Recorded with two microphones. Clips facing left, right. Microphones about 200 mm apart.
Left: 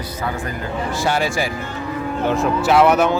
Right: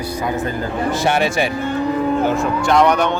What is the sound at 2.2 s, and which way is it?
Speech, centre (ahead or behind).